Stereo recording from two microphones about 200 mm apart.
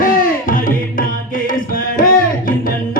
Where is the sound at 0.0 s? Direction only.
45° left (ahead or behind).